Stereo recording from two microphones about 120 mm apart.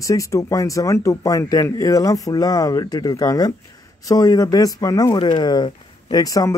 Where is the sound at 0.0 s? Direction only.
25° left (ahead or behind).